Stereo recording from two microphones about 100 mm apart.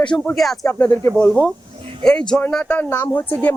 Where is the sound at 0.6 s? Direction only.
25° left (ahead or behind).